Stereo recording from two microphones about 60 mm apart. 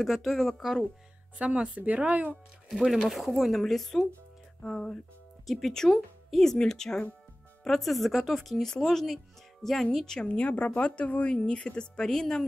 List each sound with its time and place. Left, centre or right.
0.0 s speech: centre
1.4 s speech: right
2.7 s speech: centre